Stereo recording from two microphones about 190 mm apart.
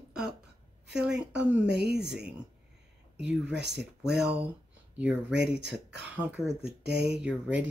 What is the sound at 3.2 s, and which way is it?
Speech, 65° right (ahead or behind).